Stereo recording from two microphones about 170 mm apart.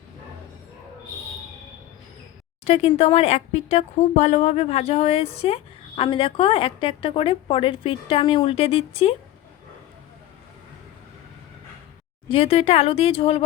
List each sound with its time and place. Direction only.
2.6 s a woman's voice: 35° left (ahead or behind)
12.3 s a woman's voice: 35° left (ahead or behind)